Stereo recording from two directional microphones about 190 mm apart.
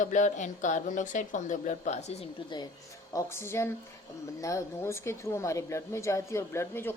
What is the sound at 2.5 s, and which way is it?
Speech, 25° left (ahead or behind).